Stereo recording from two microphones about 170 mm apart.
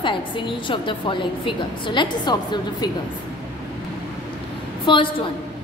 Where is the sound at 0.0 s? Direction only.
30° left (ahead or behind).